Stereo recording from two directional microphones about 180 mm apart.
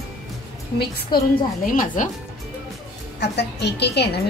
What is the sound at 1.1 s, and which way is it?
Speech, 50° left (ahead or behind).